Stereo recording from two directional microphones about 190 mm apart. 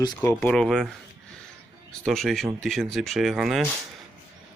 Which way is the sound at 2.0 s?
Centre (ahead or behind).